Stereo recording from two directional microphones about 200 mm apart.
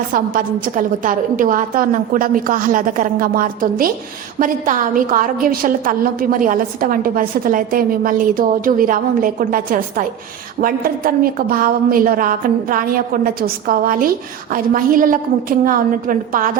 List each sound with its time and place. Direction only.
0.1 s a woman's voice: 45° right (ahead or behind)